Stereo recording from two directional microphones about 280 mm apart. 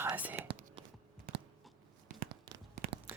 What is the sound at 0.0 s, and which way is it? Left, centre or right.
Whispering, centre.